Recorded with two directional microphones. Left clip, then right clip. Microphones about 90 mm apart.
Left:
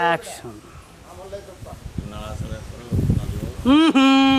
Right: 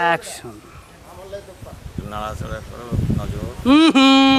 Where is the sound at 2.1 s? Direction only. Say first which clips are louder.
Right 9 dB; 30° right (ahead or behind).